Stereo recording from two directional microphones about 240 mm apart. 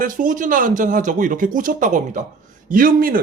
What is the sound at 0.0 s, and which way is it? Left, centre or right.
A man's voice, right.